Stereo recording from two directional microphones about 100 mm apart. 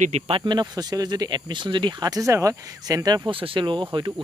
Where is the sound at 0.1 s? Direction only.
90° right.